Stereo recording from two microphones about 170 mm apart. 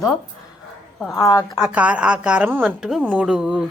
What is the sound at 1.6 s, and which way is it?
A woman's voice, 5° right (ahead or behind).